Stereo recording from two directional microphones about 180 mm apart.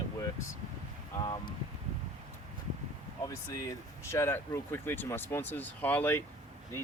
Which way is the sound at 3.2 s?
20° left (ahead or behind).